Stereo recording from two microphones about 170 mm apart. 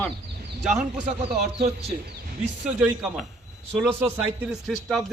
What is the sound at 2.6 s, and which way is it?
A man's voice, 5° right (ahead or behind).